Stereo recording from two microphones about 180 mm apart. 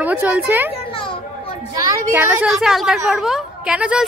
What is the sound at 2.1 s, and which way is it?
A woman's voice, 10° right (ahead or behind).